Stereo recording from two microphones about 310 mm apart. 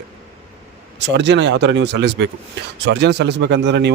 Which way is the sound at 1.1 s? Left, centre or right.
Right.